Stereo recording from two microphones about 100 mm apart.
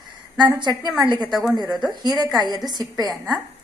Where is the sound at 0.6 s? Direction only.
50° right (ahead or behind).